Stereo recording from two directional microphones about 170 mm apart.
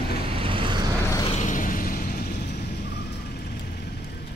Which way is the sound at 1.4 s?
50° left (ahead or behind).